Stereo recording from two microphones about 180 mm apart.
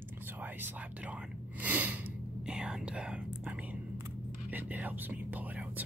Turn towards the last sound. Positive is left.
turn(degrees=-10)  # may be behind; listen again after turning